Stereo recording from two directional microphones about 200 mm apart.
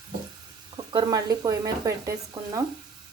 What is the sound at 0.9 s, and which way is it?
Speech, 20° right (ahead or behind).